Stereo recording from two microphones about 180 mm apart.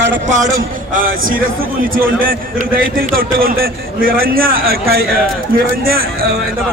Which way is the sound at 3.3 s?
55° right (ahead or behind).